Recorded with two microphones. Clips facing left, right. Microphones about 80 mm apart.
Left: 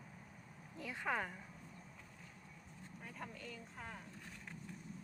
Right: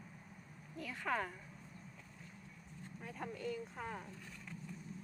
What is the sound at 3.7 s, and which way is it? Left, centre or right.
Speech, right.